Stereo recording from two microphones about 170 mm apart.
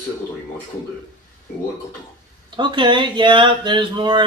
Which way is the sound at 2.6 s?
25° right (ahead or behind).